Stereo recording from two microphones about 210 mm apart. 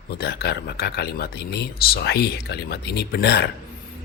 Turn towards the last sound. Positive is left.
turn(degrees=50)  # may be behind; listen again after turning